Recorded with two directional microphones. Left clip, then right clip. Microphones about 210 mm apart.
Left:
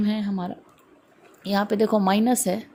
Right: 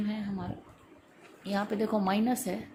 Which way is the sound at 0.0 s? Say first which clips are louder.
Left 9 dB; 50° left (ahead or behind).